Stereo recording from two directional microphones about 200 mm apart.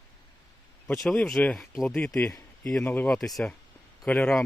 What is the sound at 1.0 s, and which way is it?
Speech, 5° left (ahead or behind).